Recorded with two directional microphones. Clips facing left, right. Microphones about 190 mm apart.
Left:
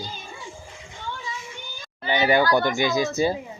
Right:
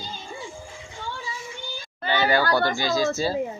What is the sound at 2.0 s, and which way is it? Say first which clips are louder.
Speech: left 2 dB; 20° left (ahead or behind).